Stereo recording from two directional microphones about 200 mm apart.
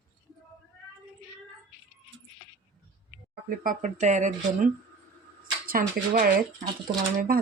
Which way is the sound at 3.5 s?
40° right (ahead or behind).